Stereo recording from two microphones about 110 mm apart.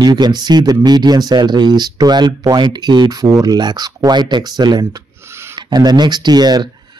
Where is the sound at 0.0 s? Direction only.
40° right (ahead or behind).